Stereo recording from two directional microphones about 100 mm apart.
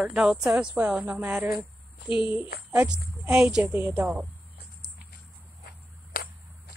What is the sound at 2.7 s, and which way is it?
Speech, 10° right (ahead or behind).